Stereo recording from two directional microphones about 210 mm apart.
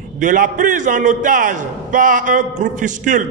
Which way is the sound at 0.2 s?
40° right (ahead or behind).